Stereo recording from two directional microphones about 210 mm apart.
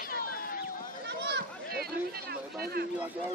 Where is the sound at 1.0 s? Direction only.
55° right (ahead or behind).